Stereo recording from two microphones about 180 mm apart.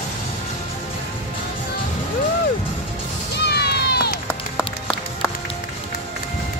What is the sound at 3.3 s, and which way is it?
Run, 65° left (ahead or behind).